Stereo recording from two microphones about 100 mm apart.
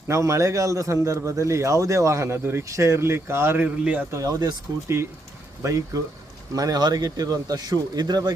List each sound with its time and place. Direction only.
0.1 s speech: 30° right (ahead or behind)
3.6 s a man's voice: 15° right (ahead or behind)
4.1 s speech: 35° right (ahead or behind)
5.6 s speech: 30° right (ahead or behind)